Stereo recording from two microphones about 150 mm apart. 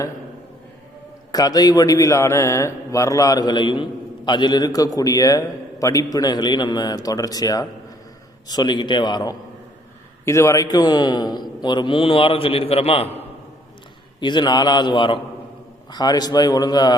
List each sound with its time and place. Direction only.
1.3 s a man's voice: 25° left (ahead or behind)
10.2 s a man's voice: 20° left (ahead or behind); by 13.2 s 40° left (ahead or behind)
14.2 s a man's voice: 30° left (ahead or behind)